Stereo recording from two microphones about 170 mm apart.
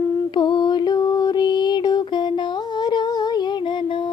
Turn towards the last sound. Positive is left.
turn(degrees=30)  # may be behind; listen again after turning